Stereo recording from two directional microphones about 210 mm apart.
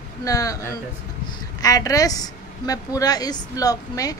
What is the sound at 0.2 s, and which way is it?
Speech, 15° left (ahead or behind).